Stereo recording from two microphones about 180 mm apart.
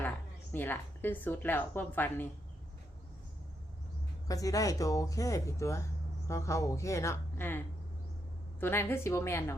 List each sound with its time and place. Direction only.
0.5 s a woman's voice: 10° left (ahead or behind)
4.3 s a woman's voice: 20° left (ahead or behind)
8.6 s a woman's voice: 15° left (ahead or behind)